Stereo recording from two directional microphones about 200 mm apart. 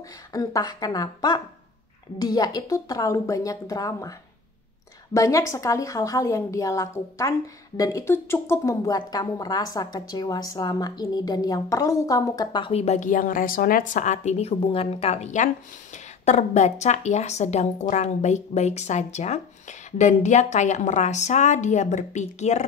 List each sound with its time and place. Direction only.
0.3 s a woman's voice: 15° left (ahead or behind)
5.1 s a woman's voice: 15° left (ahead or behind); by 22.7 s 35° left (ahead or behind)